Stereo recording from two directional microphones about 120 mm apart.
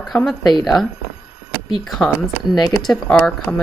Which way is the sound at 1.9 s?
Centre (ahead or behind).